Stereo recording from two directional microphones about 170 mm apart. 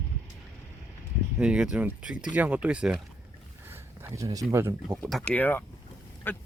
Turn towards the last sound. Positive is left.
turn(degrees=10)  # may be behind; listen again after turning